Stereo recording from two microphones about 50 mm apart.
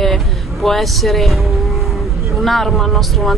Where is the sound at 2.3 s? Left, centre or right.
Centre.